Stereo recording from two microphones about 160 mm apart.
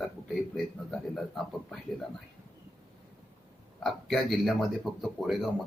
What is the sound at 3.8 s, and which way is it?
Speech, centre (ahead or behind).